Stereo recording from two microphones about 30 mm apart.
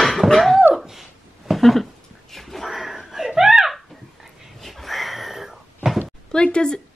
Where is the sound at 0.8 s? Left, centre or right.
Centre.